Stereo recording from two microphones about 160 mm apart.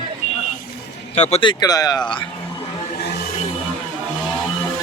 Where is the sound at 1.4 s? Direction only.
25° left (ahead or behind).